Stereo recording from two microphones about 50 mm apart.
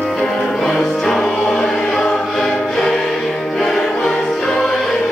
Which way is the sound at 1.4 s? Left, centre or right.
Centre.